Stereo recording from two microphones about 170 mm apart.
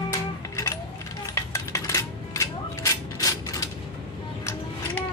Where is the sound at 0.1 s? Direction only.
20° left (ahead or behind).